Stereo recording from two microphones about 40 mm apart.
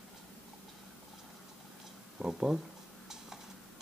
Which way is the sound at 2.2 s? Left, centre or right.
Centre.